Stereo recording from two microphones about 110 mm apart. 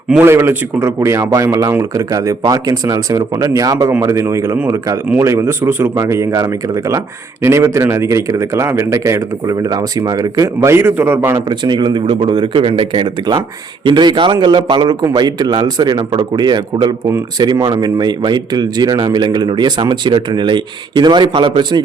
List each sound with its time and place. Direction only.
0.2 s a man's voice: 20° right (ahead or behind)
11.4 s a man's voice: 45° right (ahead or behind)